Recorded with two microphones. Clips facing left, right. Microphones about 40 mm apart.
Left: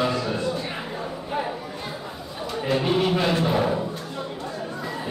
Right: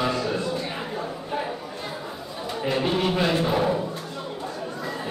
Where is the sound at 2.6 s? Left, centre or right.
Centre.